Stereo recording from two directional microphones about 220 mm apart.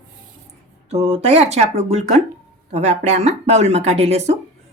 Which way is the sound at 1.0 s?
30° right (ahead or behind).